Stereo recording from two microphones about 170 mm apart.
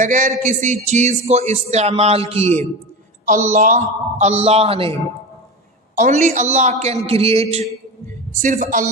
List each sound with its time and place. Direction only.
0.0 s a man's voice: 45° right (ahead or behind)
6.0 s a man's voice: 45° right (ahead or behind)
8.4 s a man's voice: 50° right (ahead or behind)